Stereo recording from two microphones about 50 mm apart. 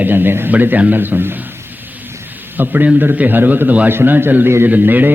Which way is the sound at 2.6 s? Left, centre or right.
Right.